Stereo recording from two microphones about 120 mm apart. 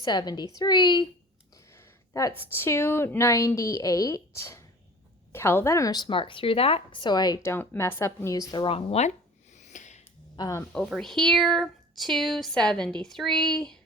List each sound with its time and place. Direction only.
0.0 s a woman's voice: 35° left (ahead or behind)
1.7 s a woman's voice: 25° left (ahead or behind)
7.4 s a woman's voice: 20° left (ahead or behind)
8.6 s speech: 55° left (ahead or behind)
9.6 s a sound: 85° left
10.3 s speech: 35° left (ahead or behind)
10.7 s speech: 5° left (ahead or behind)